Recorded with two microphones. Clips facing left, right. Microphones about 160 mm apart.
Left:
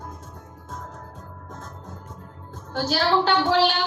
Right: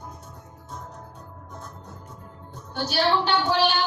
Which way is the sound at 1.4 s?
90° left.